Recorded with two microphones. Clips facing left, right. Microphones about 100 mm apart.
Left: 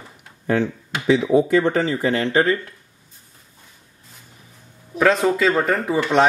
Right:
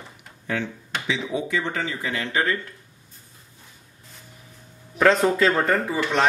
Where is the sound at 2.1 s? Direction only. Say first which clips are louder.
Left 5 dB; 30° left (ahead or behind).